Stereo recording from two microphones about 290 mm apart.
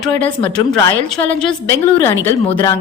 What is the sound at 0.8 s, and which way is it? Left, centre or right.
A woman's voice, centre.